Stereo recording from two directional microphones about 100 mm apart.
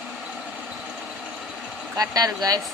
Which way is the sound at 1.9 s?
40° right (ahead or behind).